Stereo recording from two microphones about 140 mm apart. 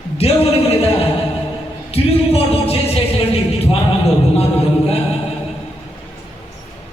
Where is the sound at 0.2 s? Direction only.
45° left (ahead or behind).